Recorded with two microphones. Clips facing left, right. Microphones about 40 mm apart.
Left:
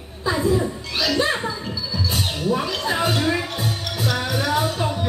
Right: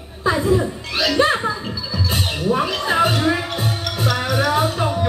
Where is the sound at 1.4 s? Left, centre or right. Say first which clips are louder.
Right 3 dB; right.